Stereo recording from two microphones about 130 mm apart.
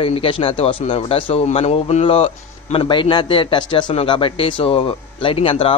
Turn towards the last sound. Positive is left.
turn(degrees=45)  # may be behind; listen again after turning